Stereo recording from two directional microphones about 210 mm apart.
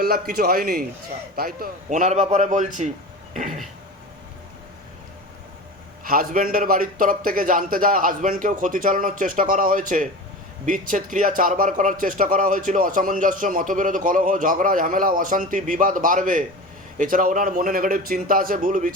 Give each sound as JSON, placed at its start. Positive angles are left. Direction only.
{"t": 0.0, "sound": "a man's voice", "side_deg": -45}
{"t": 6.1, "sound": "a man's voice", "side_deg": -40}